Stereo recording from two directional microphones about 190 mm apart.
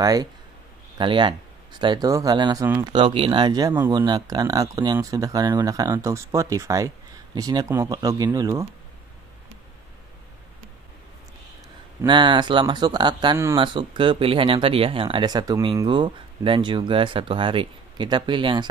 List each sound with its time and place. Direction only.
0.0 s speech: 20° right (ahead or behind)
12.1 s speech: 25° right (ahead or behind)